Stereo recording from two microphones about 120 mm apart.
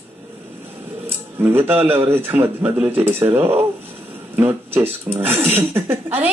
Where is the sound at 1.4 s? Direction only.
20° right (ahead or behind).